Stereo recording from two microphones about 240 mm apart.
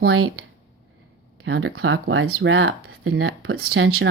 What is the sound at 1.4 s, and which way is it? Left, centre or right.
Speech, right.